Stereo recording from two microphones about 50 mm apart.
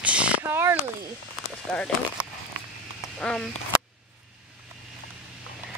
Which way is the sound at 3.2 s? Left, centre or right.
Centre.